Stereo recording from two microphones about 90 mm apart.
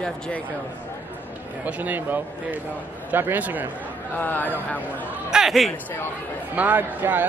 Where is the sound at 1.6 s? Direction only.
20° right (ahead or behind).